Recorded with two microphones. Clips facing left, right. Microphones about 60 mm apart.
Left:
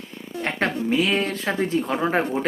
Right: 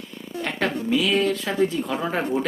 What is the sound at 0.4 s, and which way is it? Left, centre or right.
Speech, left.